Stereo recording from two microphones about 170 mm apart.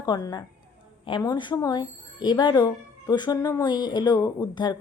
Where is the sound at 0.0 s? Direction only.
25° left (ahead or behind).